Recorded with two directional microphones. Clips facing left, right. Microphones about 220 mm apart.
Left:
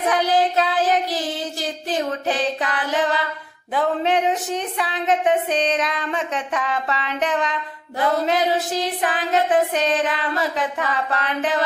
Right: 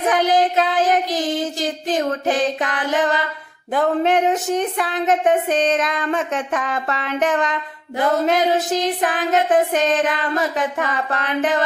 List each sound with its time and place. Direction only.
0.3 s speech: 45° right (ahead or behind)